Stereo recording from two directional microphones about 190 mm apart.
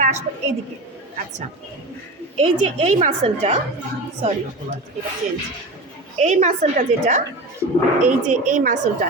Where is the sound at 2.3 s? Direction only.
35° right (ahead or behind).